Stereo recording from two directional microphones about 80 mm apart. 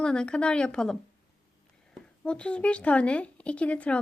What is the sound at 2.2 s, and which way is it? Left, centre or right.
Speech, centre.